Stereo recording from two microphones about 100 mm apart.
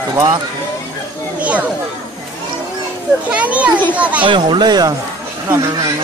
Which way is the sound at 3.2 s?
15° right (ahead or behind).